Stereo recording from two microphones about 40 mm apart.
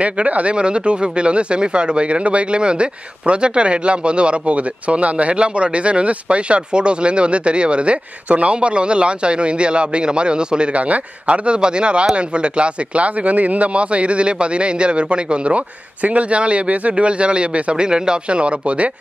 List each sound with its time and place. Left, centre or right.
0.0 s speech: right